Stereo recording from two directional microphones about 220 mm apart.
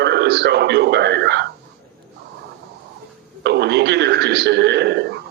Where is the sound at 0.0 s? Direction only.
50° right (ahead or behind).